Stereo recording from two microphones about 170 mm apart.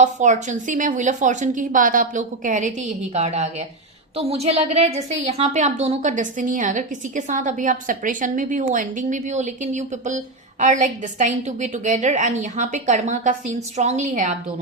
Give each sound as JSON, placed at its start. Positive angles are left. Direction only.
{"t": 0.0, "sound": "a woman's voice", "side_deg": -45}